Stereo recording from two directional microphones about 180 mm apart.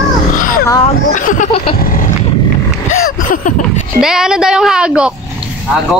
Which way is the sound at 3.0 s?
50° left (ahead or behind).